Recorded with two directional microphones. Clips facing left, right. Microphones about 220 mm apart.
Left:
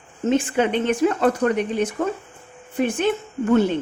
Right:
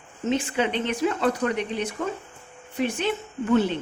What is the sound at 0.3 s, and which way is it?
Speech, 50° left (ahead or behind).